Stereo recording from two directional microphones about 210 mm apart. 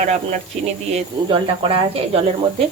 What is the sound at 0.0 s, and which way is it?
Speech, 35° right (ahead or behind).